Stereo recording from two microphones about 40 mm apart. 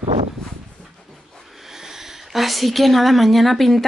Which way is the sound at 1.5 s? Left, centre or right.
Centre.